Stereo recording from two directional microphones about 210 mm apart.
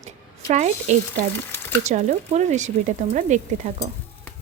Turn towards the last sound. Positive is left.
turn(degrees=-35)  # may be behind; listen again after turning